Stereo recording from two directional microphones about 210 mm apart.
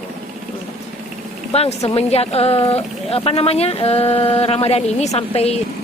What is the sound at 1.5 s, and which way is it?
Speech, 30° left (ahead or behind).